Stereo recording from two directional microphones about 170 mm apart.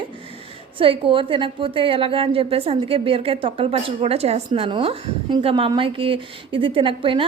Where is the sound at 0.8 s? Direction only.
30° right (ahead or behind).